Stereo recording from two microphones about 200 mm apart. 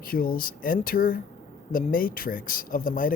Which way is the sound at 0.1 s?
45° left (ahead or behind).